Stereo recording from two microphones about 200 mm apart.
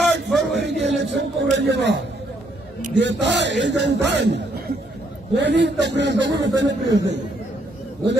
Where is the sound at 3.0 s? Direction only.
60° right (ahead or behind).